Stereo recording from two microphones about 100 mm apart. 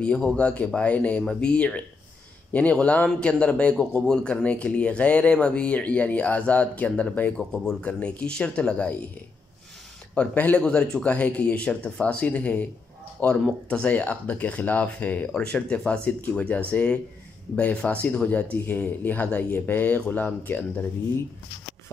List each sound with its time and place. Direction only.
0.0 s speech: 10° left (ahead or behind)
10.1 s speech: 15° left (ahead or behind)